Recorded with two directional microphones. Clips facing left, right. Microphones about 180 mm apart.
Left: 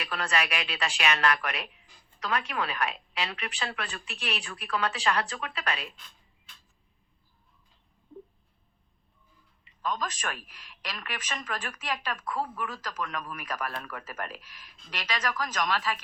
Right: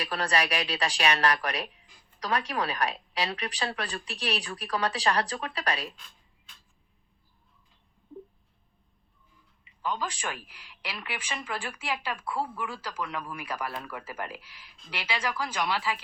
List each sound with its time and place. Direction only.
0.0 s a woman's voice: 35° right (ahead or behind)
9.8 s speech: 10° right (ahead or behind)